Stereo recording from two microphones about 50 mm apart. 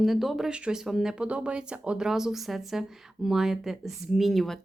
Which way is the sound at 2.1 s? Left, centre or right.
Centre.